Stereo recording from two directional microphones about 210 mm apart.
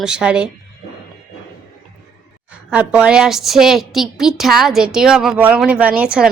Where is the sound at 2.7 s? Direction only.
5° right (ahead or behind).